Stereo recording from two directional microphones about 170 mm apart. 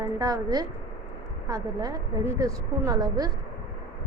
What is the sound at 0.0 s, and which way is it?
A woman's voice, 20° right (ahead or behind).